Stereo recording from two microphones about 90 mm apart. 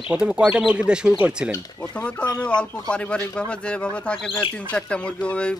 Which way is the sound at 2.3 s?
50° left (ahead or behind).